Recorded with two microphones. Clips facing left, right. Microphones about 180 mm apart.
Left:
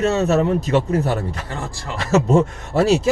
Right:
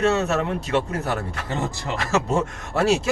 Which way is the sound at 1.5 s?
20° right (ahead or behind).